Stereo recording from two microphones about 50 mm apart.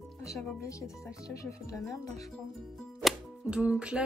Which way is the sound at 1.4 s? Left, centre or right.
Left.